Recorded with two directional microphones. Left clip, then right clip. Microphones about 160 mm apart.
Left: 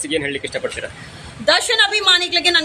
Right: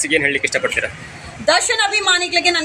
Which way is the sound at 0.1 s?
Centre (ahead or behind).